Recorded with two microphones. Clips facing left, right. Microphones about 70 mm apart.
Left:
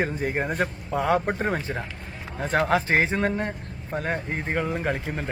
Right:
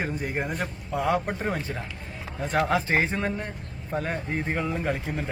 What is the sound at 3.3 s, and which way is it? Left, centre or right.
Speech, left.